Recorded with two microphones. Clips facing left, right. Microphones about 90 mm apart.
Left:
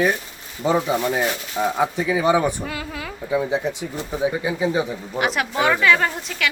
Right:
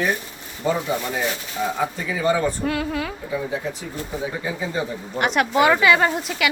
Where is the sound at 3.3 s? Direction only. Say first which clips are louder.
Left 8 dB; 20° left (ahead or behind).